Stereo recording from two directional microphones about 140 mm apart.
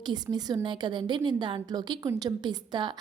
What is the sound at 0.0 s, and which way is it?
A woman's voice, 30° right (ahead or behind).